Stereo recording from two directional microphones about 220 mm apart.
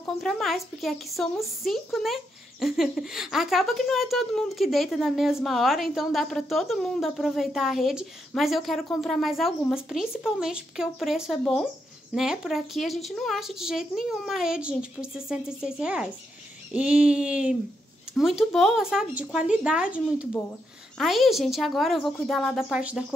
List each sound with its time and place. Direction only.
0.0 s a woman's voice: centre (ahead or behind)